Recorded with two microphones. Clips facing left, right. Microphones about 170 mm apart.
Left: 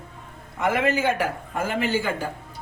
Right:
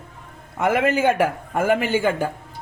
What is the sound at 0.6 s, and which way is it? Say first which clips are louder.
A man's voice: right 3 dB; 50° right (ahead or behind).